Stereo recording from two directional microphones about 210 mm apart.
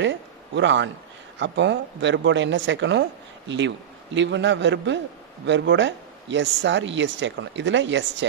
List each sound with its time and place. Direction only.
0.0 s a man's voice: 60° right (ahead or behind)